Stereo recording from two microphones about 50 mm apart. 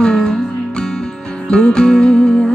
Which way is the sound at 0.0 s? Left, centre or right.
Centre.